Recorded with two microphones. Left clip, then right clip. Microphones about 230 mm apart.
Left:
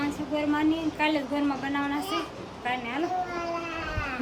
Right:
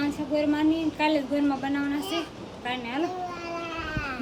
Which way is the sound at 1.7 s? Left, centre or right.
Centre.